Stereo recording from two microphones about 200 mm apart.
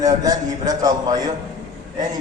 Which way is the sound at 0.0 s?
20° right (ahead or behind).